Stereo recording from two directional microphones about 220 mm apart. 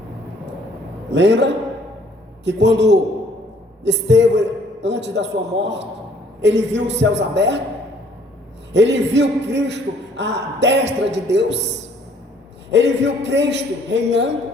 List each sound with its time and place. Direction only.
1.1 s a man's voice: 55° right (ahead or behind)
8.7 s a man's voice: 55° right (ahead or behind)
12.7 s a man's voice: 55° right (ahead or behind)